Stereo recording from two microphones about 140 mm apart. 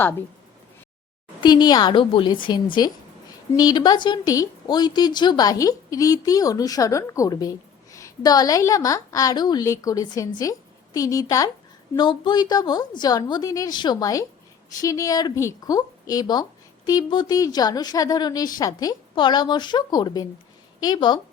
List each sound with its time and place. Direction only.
1.4 s a woman's voice: 30° left (ahead or behind)